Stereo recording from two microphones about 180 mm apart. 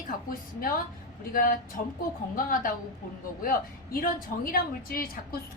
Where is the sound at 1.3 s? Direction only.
50° left (ahead or behind).